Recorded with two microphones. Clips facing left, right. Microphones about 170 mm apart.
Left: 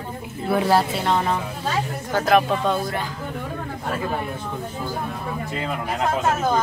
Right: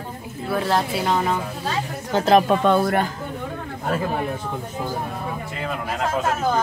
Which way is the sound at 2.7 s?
60° right (ahead or behind).